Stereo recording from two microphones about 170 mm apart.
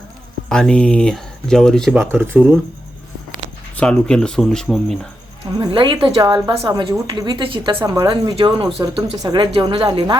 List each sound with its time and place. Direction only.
0.4 s speech: 5° left (ahead or behind)
2.2 s speech: 10° right (ahead or behind)
3.8 s speech: 5° left (ahead or behind)
5.5 s speech: 30° right (ahead or behind)